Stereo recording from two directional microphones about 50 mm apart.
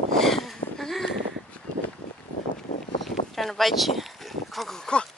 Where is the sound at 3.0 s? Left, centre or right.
Centre.